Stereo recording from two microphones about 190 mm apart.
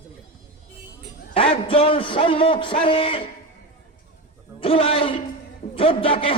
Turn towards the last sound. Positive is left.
turn(degrees=30)  # may be behind; listen again after turning